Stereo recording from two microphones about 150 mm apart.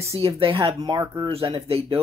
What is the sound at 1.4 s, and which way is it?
Speech, 35° right (ahead or behind).